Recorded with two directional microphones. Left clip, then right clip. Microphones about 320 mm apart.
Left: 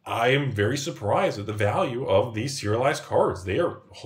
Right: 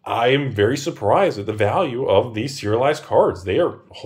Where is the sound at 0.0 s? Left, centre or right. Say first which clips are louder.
Right 5 dB; centre.